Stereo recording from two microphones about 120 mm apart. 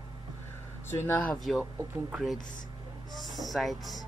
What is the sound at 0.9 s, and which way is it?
Speech, 20° left (ahead or behind).